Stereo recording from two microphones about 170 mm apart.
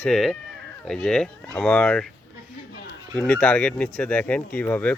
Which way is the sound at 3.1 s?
5° left (ahead or behind).